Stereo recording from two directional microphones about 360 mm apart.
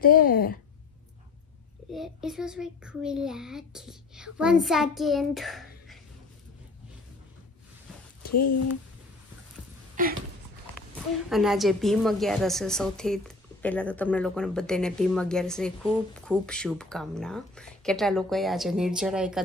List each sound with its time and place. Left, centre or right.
0.0 s speech: left
1.9 s a woman's voice: centre
8.3 s speech: left
9.9 s a sound: right
11.2 s a woman's voice: centre